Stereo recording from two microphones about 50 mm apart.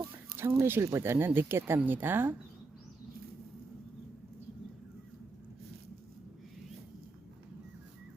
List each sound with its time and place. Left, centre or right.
0.3 s speech: right
1.1 s speech: right
1.8 s speech: right